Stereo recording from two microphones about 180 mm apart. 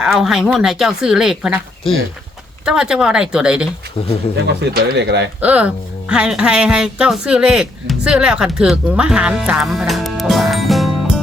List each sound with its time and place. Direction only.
0.0 s speech: 5° right (ahead or behind)
2.6 s speech: 5° right (ahead or behind)
4.4 s speech: 70° right (ahead or behind)
5.4 s speech: 5° right (ahead or behind)